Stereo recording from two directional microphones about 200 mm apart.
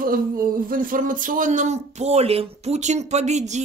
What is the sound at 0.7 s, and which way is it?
Speech, 45° right (ahead or behind).